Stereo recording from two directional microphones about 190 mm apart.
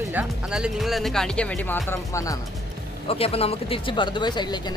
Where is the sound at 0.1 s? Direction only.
5° right (ahead or behind); by 2.4 s 15° left (ahead or behind).